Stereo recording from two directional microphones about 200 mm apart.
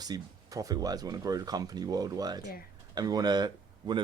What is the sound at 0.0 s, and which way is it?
Speech, 15° right (ahead or behind).